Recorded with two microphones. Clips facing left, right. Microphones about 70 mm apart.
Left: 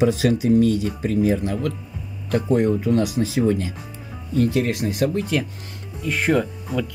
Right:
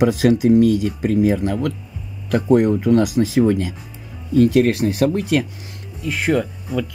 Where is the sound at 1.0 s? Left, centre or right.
Right.